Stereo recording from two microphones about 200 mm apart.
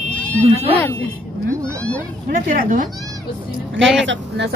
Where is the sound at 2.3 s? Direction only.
45° right (ahead or behind).